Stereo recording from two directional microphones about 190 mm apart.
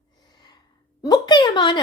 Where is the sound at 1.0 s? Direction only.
20° left (ahead or behind).